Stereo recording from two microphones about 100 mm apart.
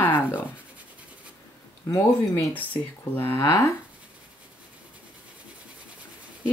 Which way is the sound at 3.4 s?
35° left (ahead or behind).